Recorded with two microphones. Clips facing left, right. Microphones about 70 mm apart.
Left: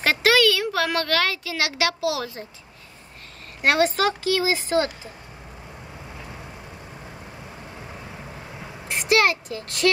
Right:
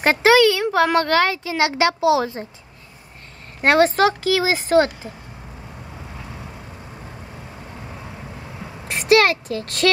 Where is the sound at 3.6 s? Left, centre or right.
Right.